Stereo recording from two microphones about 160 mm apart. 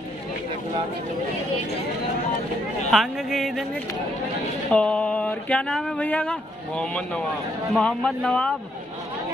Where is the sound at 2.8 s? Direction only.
Centre (ahead or behind).